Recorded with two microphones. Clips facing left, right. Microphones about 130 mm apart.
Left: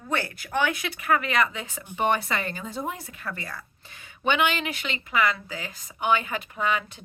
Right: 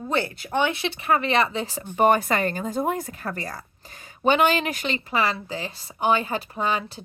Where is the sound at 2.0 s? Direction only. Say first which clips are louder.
Right 6 dB; 45° right (ahead or behind).